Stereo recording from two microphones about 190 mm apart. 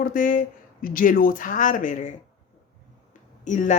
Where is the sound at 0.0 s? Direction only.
45° left (ahead or behind).